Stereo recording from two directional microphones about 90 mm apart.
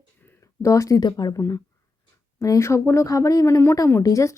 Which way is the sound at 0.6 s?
35° left (ahead or behind).